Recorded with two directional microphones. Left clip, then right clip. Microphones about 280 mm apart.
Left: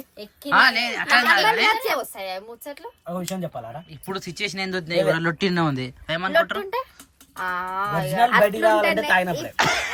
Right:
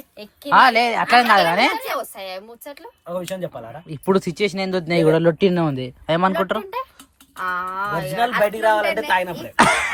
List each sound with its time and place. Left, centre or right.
0.2 s speech: centre
1.7 s a woman's voice: centre
3.1 s speech: centre
6.1 s speech: centre
6.8 s a sound: right
7.3 s a woman's voice: centre
8.4 s speech: centre
8.8 s a man's voice: left
9.0 s a woman's voice: centre
9.6 s speech: right